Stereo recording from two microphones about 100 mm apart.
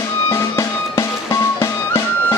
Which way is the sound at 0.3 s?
30° left (ahead or behind).